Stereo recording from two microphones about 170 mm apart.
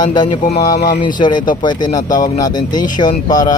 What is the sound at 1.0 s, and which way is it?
Speech, 25° left (ahead or behind).